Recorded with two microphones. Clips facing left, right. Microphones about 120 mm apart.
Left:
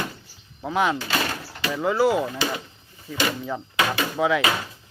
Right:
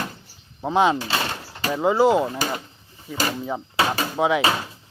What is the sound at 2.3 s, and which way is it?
Speech, 45° right (ahead or behind).